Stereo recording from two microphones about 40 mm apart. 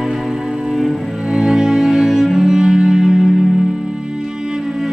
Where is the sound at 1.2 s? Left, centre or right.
Centre.